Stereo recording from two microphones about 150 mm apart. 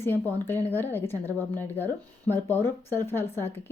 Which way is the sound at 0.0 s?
15° left (ahead or behind).